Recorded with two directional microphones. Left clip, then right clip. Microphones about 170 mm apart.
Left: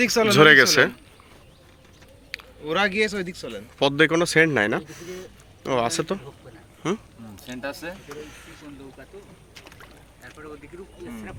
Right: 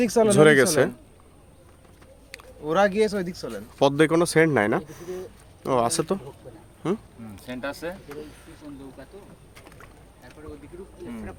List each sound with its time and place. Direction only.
0.0 s speech: 50° right (ahead or behind)
0.3 s speech: 5° right (ahead or behind)
2.3 s a sound: 10° right (ahead or behind)
2.6 s speech: 45° right (ahead or behind)
3.8 s speech: 25° right (ahead or behind)
6.8 s speech: 10° right (ahead or behind)